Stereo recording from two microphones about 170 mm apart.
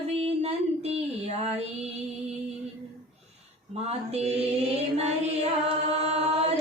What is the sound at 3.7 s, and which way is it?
Female singing, 40° right (ahead or behind).